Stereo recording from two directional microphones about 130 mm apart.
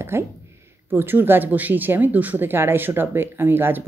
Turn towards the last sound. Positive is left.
turn(degrees=-15)  # may be behind; listen again after turning